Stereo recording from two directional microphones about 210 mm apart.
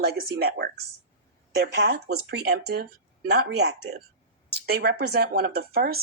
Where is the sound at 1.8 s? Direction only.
50° right (ahead or behind).